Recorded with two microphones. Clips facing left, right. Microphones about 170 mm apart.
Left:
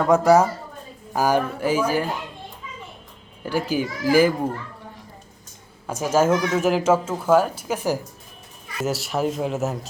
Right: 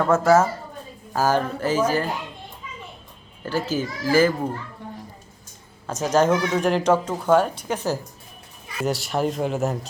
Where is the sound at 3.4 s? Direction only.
15° left (ahead or behind).